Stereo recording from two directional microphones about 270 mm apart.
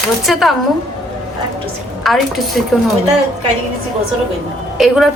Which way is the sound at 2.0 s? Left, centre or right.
Centre.